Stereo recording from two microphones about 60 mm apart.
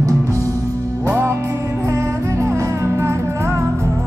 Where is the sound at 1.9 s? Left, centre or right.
Right.